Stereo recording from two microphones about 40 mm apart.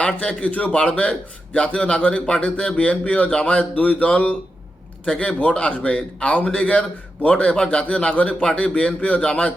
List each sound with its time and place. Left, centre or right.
0.0 s a man's voice: left